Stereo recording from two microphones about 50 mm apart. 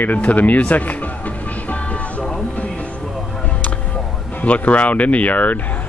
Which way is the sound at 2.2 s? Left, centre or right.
Centre.